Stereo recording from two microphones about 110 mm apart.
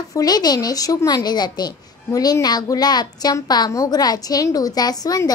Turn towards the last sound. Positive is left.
turn(degrees=35)  # may be behind; listen again after turning